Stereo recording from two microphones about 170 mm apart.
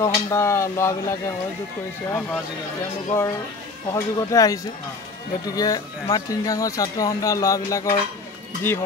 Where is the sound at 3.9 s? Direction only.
20° left (ahead or behind).